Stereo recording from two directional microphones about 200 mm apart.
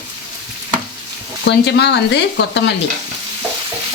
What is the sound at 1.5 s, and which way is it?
Frying, 60° left (ahead or behind).